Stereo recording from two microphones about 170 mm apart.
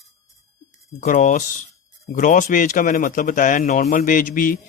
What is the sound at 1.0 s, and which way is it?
Speech, 50° left (ahead or behind).